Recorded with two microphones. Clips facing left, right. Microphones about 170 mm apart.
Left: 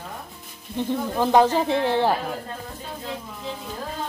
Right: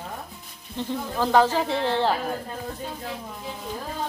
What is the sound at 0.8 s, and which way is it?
Speech, 20° left (ahead or behind).